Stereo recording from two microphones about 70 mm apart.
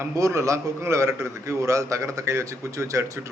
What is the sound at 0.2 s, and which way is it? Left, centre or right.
A man's voice, right.